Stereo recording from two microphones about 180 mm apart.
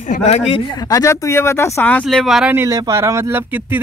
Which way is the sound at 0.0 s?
40° left (ahead or behind).